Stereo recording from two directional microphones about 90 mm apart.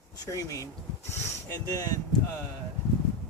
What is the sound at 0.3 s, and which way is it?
Speech, 35° left (ahead or behind).